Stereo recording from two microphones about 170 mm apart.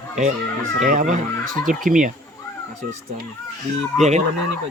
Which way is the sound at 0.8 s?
50° right (ahead or behind).